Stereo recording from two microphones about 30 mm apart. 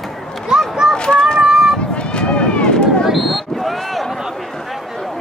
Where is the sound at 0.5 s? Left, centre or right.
Right.